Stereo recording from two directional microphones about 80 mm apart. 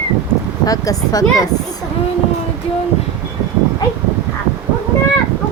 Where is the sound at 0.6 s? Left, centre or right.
Left.